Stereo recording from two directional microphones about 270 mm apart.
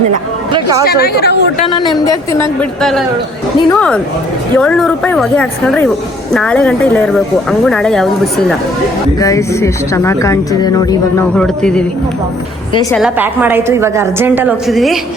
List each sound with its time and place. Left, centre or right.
0.5 s a woman's voice: centre
0.9 s speech: left
1.6 s speech: centre
9.2 s speech: centre
12.9 s a woman's voice: centre